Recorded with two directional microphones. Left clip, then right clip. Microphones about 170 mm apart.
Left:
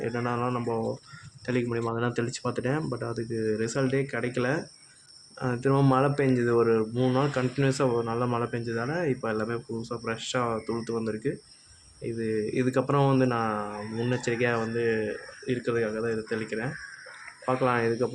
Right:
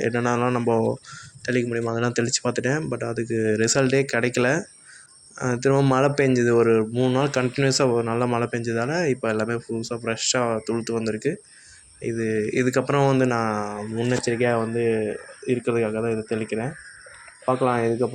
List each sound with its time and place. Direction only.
0.0 s speech: 20° right (ahead or behind)
17.7 s speech: 25° right (ahead or behind)